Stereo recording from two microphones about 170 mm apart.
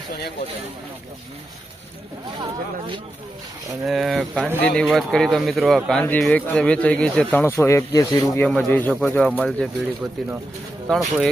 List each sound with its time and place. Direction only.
2.4 s speech: 30° right (ahead or behind)
3.8 s speech: centre (ahead or behind); by 8.4 s 20° left (ahead or behind)
8.4 s speech: 5° left (ahead or behind)